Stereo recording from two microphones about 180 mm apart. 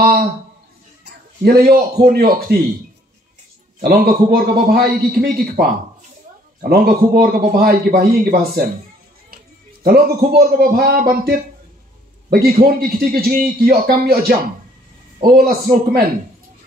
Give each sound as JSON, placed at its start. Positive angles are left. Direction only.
{"t": 0.0, "sound": "a sound", "side_deg": -55}
{"t": 1.4, "sound": "a man's voice", "side_deg": -55}
{"t": 3.8, "sound": "a man's voice", "side_deg": -55}
{"t": 6.7, "sound": "a man's voice", "side_deg": -55}
{"t": 9.8, "sound": "a man's voice", "side_deg": -55}